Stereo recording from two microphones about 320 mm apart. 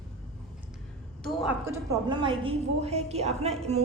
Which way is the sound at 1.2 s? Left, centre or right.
Centre.